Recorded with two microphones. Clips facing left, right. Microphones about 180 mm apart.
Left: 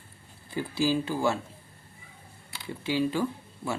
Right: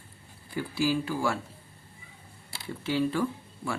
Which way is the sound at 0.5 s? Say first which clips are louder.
Left 1 dB; 25° left (ahead or behind).